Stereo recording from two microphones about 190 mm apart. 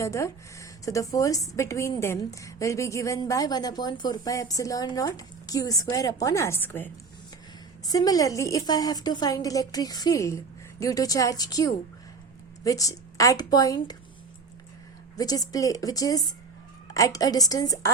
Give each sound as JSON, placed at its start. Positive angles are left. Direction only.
{"t": 0.0, "sound": "a woman's voice", "side_deg": 15}
{"t": 15.1, "sound": "a woman's voice", "side_deg": 20}